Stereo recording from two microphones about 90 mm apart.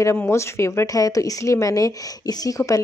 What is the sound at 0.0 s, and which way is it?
Speech, 30° left (ahead or behind).